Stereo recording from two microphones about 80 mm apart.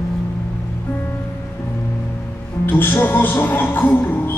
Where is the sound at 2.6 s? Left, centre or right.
Left.